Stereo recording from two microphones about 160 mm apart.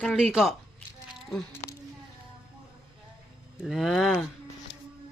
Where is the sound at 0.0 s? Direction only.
Centre (ahead or behind).